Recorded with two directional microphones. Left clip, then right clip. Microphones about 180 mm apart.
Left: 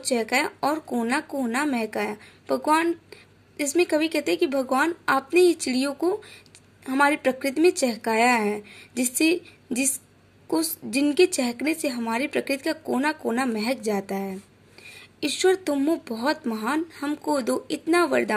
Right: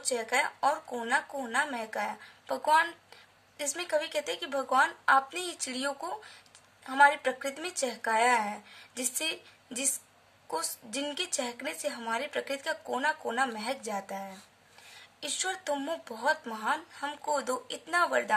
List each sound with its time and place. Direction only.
0.0 s a woman's voice: 25° left (ahead or behind)